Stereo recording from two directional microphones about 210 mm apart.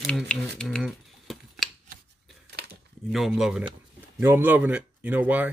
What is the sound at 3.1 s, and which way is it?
Speech, centre (ahead or behind).